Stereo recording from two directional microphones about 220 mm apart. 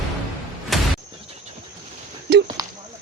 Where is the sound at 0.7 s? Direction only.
Centre (ahead or behind).